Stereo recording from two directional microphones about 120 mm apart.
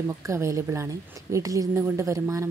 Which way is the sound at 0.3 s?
25° right (ahead or behind).